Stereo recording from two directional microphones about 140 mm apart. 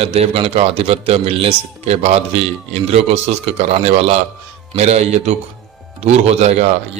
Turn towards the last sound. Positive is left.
turn(degrees=-50)  # may be behind; listen again after turning